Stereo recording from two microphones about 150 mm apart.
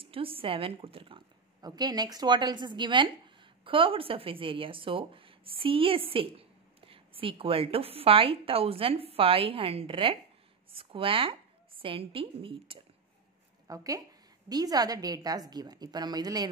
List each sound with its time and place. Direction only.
0.0 s a woman's voice: 40° right (ahead or behind)
13.7 s a woman's voice: 25° right (ahead or behind)